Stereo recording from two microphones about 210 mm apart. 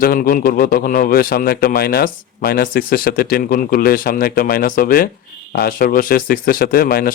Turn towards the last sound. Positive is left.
turn(degrees=45)  # may be behind; listen again after turning